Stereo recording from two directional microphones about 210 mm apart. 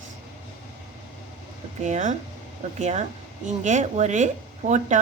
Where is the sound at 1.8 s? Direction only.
35° right (ahead or behind).